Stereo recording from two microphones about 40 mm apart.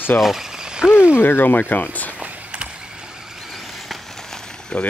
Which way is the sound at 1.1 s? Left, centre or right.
Left.